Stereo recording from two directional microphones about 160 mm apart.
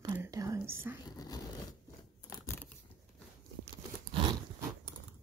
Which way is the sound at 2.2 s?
15° left (ahead or behind).